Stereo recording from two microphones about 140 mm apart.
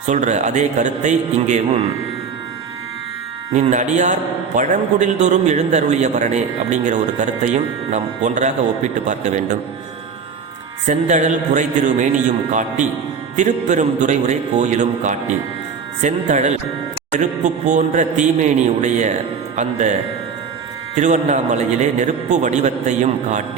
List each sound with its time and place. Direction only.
0.0 s a man's voice: 60° right (ahead or behind)
3.5 s a man's voice: 60° right (ahead or behind)
10.8 s a man's voice: 60° right (ahead or behind)
17.7 s a man's voice: 60° right (ahead or behind)